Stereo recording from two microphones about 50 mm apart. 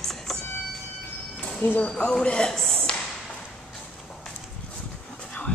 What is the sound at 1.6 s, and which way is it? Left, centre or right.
Speech, left.